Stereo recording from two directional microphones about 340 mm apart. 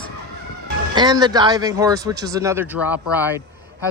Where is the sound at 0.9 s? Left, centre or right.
Centre.